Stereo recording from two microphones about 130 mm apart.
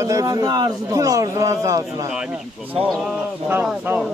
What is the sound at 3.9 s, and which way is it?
Speech, 15° right (ahead or behind).